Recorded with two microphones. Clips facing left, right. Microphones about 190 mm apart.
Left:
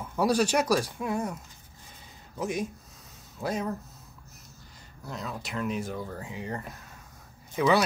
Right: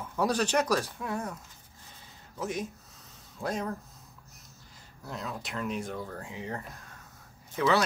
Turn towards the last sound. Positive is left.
turn(degrees=15)  # may be behind; listen again after turning